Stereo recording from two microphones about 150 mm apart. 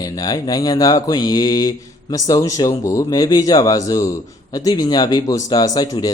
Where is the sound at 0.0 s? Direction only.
25° left (ahead or behind).